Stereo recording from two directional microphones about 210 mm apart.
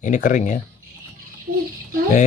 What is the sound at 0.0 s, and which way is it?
Speech, 35° left (ahead or behind).